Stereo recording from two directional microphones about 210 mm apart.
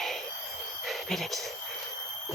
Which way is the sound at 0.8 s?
Centre (ahead or behind).